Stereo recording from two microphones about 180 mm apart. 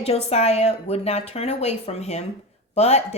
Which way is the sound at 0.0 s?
35° left (ahead or behind).